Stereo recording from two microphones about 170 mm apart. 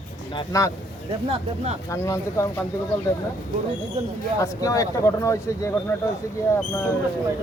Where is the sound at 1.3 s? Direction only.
40° right (ahead or behind).